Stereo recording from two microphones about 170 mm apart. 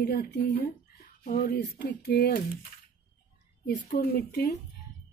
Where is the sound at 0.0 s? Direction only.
65° left (ahead or behind).